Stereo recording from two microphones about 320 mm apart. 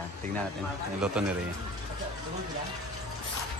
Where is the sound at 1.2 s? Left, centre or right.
Centre.